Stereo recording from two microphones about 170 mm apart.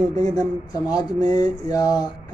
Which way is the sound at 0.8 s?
25° left (ahead or behind).